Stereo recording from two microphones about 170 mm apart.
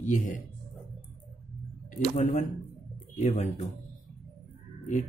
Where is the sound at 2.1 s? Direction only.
45° left (ahead or behind).